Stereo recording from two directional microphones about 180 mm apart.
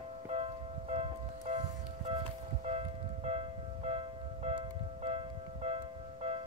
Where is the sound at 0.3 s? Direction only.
35° right (ahead or behind).